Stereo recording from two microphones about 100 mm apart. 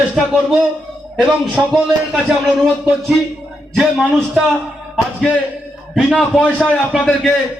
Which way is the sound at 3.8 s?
Centre (ahead or behind).